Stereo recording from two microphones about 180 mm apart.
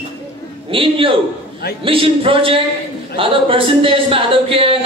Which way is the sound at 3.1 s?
30° right (ahead or behind).